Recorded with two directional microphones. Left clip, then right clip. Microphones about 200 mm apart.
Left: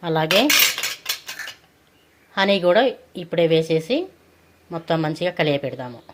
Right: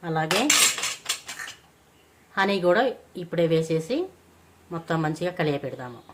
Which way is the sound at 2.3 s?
15° left (ahead or behind).